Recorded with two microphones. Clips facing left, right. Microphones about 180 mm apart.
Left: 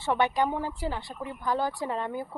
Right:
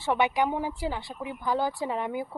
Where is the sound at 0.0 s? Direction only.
10° right (ahead or behind).